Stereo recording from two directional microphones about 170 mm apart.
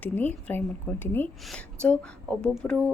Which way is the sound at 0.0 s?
10° left (ahead or behind).